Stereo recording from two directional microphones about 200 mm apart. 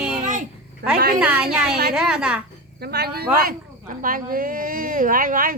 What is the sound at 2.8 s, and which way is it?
Speech, 55° right (ahead or behind).